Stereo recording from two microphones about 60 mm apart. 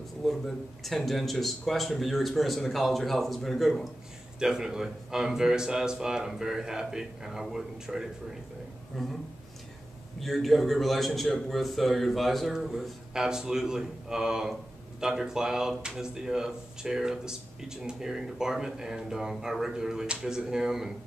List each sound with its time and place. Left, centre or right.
0.2 s speech: centre
4.4 s speech: centre
10.2 s speech: centre